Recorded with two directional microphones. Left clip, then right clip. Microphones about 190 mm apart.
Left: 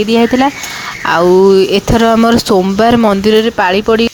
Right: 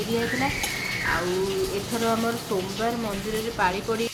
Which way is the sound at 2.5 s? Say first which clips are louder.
Left 18 dB; 60° left (ahead or behind).